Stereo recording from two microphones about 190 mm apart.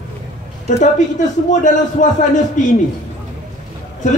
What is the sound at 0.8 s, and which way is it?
Speech, 40° left (ahead or behind).